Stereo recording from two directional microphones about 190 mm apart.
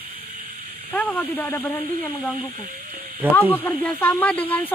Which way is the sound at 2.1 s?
Centre (ahead or behind).